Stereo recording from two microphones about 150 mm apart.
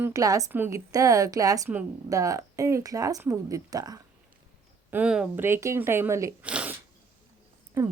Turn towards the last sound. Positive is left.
turn(degrees=-15)  # may be behind; listen again after turning